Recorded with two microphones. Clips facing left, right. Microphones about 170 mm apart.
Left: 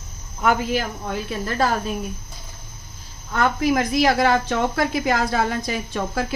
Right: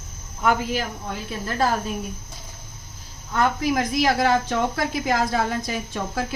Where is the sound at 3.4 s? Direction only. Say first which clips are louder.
Left 2 dB; 70° left (ahead or behind).